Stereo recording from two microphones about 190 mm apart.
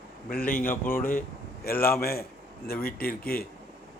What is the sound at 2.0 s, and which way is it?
Speech, 55° left (ahead or behind).